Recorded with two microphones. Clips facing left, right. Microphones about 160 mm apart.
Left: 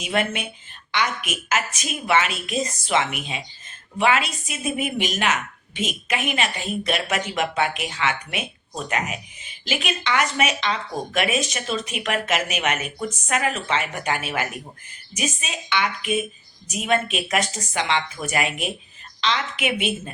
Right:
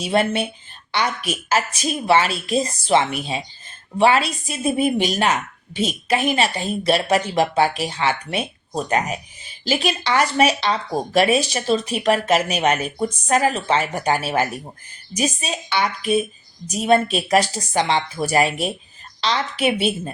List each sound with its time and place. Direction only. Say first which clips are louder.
0.0 s a woman's voice: right 5 dB; 35° right (ahead or behind)